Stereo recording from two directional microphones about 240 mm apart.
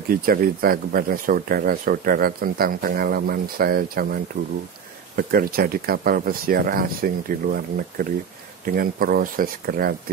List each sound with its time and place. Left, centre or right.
0.1 s speech: right